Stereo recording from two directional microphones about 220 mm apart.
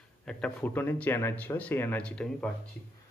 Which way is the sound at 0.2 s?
5° left (ahead or behind).